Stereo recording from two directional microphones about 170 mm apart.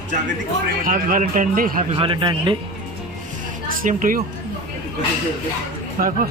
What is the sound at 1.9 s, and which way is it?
Speech, 30° right (ahead or behind).